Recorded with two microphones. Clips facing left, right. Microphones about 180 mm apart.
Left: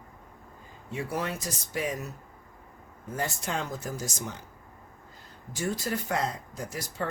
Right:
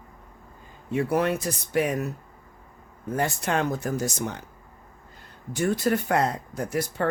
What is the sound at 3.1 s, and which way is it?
Speech, 65° right (ahead or behind).